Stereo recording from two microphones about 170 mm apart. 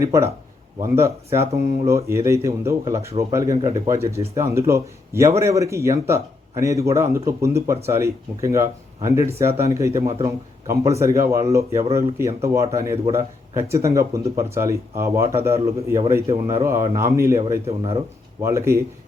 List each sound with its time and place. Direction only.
0.0 s a man's voice: 15° right (ahead or behind)